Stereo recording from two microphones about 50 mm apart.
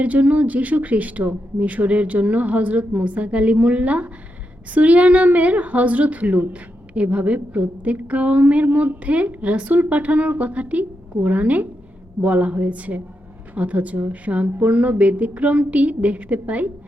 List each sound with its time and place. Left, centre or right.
0.0 s a woman's voice: right